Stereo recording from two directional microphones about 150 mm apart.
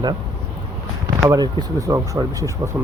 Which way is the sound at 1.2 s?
25° right (ahead or behind).